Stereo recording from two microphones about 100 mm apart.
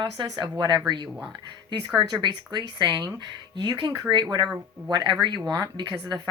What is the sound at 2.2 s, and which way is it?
Speech, 50° right (ahead or behind).